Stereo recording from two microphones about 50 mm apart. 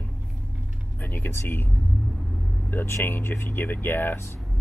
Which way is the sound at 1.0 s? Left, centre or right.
Left.